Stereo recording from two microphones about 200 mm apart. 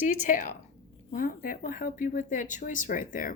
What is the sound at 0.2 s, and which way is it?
Speech, 40° left (ahead or behind).